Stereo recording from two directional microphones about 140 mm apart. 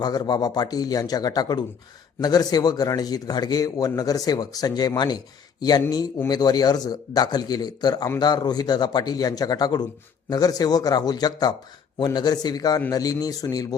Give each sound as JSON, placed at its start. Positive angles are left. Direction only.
{"t": 0.0, "sound": "a man's voice", "side_deg": 30}